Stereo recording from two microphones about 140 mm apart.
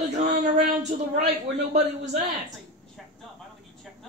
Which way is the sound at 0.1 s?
60° right (ahead or behind).